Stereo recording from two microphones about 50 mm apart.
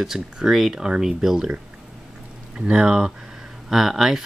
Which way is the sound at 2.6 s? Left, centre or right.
Centre.